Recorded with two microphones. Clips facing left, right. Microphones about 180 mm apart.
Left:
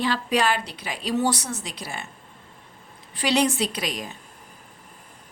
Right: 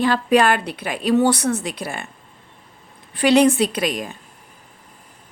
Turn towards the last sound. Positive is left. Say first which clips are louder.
# right 7 dB
turn(degrees=-55)  # may be behind; listen again after turning